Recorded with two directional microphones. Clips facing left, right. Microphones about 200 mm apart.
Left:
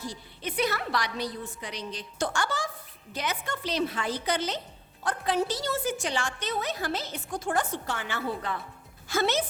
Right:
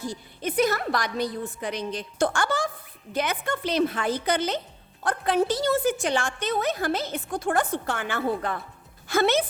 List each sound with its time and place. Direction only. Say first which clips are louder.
0.0 s a woman's voice: right 5 dB; 50° right (ahead or behind)